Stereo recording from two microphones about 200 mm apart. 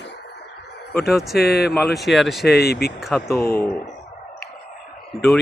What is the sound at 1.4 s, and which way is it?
Speech, 50° left (ahead or behind).